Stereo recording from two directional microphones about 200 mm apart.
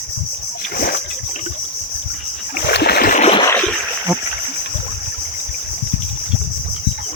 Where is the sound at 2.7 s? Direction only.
55° left (ahead or behind); by 3.4 s 40° left (ahead or behind).